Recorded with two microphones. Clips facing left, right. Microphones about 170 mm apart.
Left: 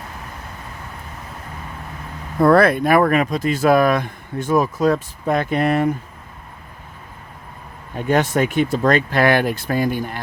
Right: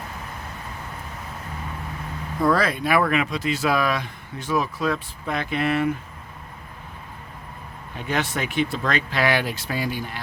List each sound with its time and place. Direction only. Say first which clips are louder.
2.4 s speech: left 8 dB; 60° left (ahead or behind)
7.9 s speech: left 9 dB; 45° left (ahead or behind)